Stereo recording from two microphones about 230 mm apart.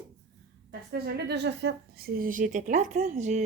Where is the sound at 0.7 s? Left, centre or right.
Right.